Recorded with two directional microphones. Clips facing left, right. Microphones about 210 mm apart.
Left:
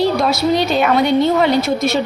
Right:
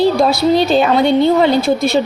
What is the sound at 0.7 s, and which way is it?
A woman's voice, 30° right (ahead or behind).